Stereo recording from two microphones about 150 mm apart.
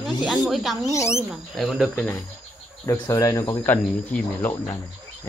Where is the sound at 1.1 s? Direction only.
Centre (ahead or behind).